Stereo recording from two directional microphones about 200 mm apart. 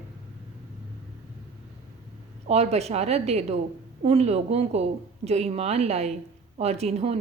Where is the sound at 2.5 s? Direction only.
30° right (ahead or behind).